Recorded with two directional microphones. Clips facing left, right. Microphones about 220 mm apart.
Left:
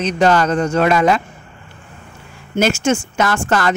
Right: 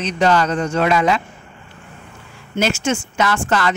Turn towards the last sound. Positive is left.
turn(degrees=45)  # may be behind; listen again after turning